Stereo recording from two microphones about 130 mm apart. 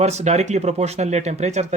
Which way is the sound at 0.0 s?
60° right (ahead or behind).